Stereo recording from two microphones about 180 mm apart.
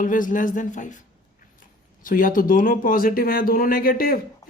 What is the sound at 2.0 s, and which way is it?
Speech, 50° left (ahead or behind).